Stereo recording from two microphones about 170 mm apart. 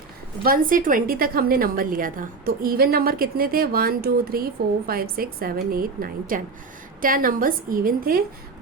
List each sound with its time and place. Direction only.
0.4 s a woman's voice: 55° right (ahead or behind)